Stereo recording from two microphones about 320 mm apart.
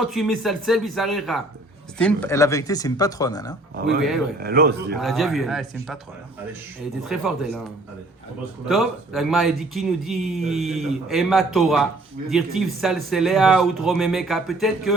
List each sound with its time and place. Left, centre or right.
0.0 s a man's voice: centre
4.4 s speech: right
4.9 s a man's voice: centre
7.0 s a man's voice: centre
8.6 s a man's voice: centre